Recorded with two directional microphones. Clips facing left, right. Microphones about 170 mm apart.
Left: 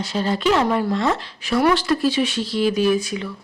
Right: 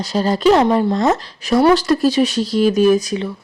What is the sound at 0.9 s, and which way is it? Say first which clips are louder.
Speech: right 5 dB; 40° right (ahead or behind).